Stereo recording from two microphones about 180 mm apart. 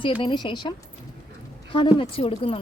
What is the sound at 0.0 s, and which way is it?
Speech, 25° left (ahead or behind).